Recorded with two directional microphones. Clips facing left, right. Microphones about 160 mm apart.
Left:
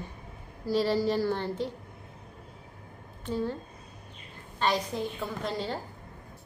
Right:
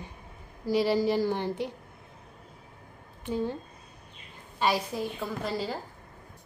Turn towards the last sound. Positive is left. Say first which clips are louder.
# right 1 dB
turn(degrees=-5)  # may be behind; listen again after turning